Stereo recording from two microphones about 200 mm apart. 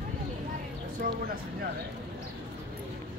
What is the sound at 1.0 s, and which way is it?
Speech, 45° right (ahead or behind).